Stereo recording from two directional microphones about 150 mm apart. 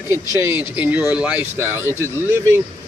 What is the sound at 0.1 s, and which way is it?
Speech, 15° right (ahead or behind).